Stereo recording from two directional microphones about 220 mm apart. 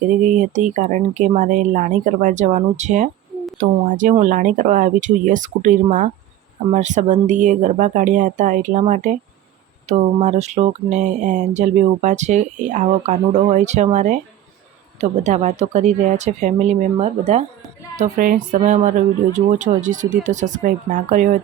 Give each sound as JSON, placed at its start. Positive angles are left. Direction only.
{"t": 0.2, "sound": "speech", "side_deg": -35}
{"t": 15.2, "sound": "speech", "side_deg": -35}